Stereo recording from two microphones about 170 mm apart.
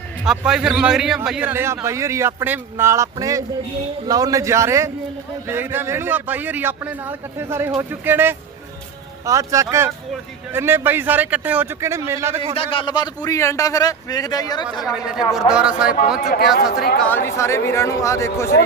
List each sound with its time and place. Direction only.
0.3 s a man's voice: 5° right (ahead or behind)
12.5 s a man's voice: 30° left (ahead or behind)
14.8 s a man's voice: 5° right (ahead or behind)
17.0 s speech: 10° left (ahead or behind)